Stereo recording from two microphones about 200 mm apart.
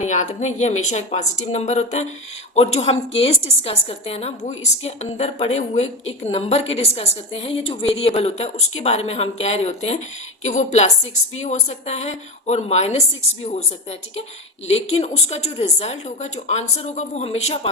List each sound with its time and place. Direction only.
0.0 s a woman's voice: 35° left (ahead or behind)
14.7 s a woman's voice: 30° left (ahead or behind)